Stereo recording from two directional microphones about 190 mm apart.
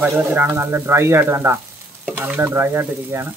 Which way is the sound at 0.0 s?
10° right (ahead or behind).